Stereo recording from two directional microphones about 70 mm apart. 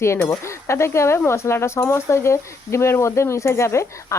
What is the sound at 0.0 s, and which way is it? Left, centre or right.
Speech, left.